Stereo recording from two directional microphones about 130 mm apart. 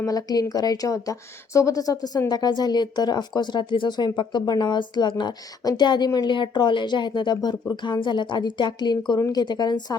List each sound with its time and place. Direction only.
0.0 s speech: 30° left (ahead or behind)